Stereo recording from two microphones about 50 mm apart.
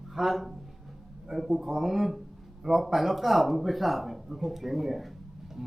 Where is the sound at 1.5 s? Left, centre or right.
Centre.